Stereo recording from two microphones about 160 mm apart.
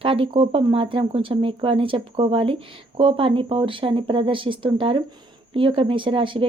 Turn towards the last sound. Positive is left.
turn(degrees=-35)  # may be behind; listen again after turning